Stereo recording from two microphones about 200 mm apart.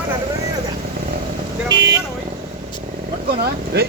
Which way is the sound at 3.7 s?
55° right (ahead or behind).